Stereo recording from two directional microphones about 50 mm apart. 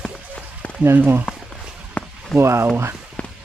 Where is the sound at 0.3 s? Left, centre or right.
Left.